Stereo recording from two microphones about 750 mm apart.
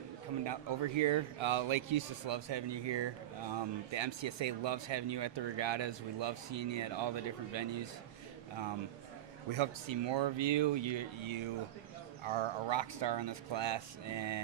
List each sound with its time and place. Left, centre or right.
0.4 s a man's voice: right
9.5 s a man's voice: right